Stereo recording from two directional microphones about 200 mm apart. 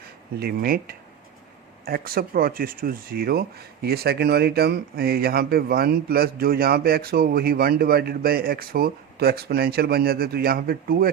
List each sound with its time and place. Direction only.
0.3 s speech: 50° right (ahead or behind)